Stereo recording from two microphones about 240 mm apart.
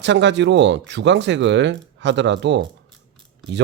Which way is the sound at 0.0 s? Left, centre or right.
Right.